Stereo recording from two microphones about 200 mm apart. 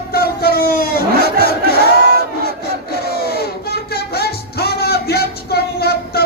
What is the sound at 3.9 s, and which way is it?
Music, 50° left (ahead or behind).